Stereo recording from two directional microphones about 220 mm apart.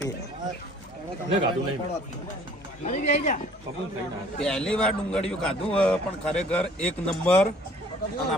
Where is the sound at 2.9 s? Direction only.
35° left (ahead or behind).